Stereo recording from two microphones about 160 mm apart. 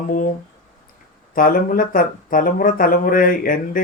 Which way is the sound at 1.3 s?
60° left (ahead or behind).